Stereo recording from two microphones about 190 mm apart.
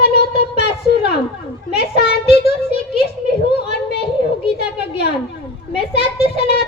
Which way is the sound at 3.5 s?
60° left (ahead or behind).